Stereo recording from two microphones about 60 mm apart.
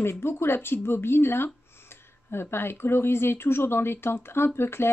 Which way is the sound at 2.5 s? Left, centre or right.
Left.